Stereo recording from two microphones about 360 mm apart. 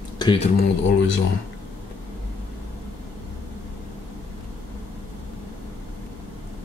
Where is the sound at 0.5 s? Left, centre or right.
Left.